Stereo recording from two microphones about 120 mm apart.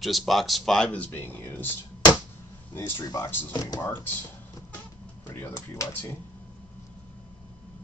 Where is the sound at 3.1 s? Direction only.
25° left (ahead or behind).